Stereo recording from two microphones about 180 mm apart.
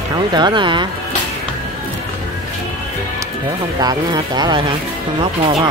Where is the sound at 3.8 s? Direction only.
20° right (ahead or behind).